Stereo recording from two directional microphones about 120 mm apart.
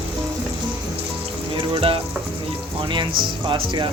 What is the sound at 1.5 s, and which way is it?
Music, 45° right (ahead or behind).